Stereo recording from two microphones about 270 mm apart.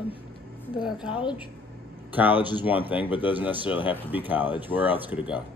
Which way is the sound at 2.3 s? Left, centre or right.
Centre.